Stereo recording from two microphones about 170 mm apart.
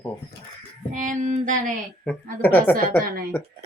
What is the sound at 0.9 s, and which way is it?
Child singing, 45° right (ahead or behind).